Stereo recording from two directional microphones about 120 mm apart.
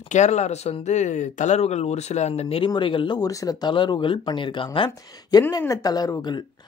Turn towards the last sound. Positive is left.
turn(degrees=35)  # may be behind; listen again after turning